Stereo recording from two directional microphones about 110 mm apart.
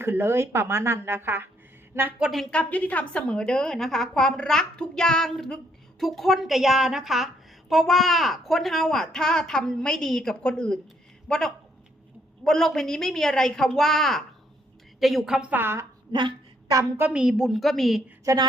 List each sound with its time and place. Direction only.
0.0 s a woman's voice: 20° right (ahead or behind)
16.1 s a sound: 45° right (ahead or behind)
17.0 s a child's voice: 10° right (ahead or behind)
18.3 s a woman's voice: 30° right (ahead or behind)